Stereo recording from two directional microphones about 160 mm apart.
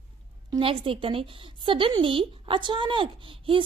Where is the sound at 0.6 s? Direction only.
35° right (ahead or behind).